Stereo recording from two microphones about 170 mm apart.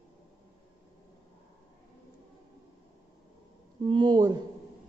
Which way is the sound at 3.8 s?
25° right (ahead or behind).